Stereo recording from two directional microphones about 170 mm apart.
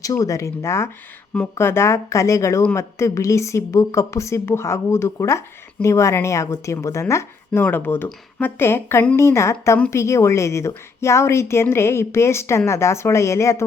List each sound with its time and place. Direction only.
0.0 s speech: 20° left (ahead or behind)